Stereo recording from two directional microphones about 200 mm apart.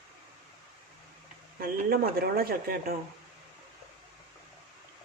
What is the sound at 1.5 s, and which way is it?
Speech, 50° right (ahead or behind).